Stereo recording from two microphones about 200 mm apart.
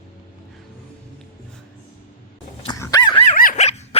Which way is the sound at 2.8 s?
20° left (ahead or behind).